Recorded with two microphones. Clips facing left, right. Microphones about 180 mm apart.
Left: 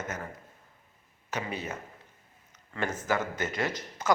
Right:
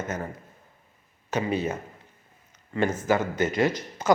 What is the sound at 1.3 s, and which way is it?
Speech, 25° right (ahead or behind).